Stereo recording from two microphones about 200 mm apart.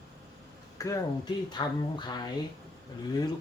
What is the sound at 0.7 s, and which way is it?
Speech, 15° left (ahead or behind).